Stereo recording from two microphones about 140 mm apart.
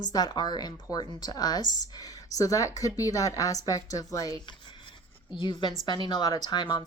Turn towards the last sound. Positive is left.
turn(degrees=30)  # may be behind; listen again after turning